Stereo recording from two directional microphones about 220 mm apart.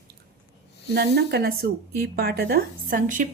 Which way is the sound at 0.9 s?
45° right (ahead or behind).